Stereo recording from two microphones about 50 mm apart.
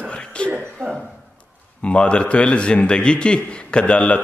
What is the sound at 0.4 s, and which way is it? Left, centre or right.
Speech, left.